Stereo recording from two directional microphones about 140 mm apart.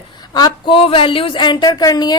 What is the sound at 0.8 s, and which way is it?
A woman's voice, 40° left (ahead or behind).